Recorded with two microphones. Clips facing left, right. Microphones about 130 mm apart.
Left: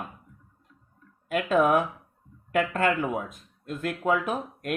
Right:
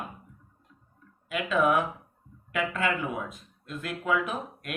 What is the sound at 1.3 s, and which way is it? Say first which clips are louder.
Speech: left 3 dB; 45° left (ahead or behind).